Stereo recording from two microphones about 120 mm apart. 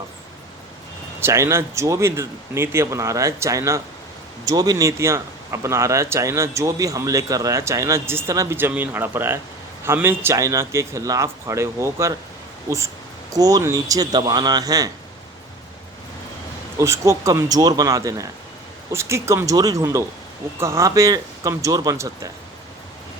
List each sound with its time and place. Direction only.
1.2 s speech: 25° right (ahead or behind)
13.3 s a man's voice: 30° right (ahead or behind)
16.7 s speech: 25° right (ahead or behind)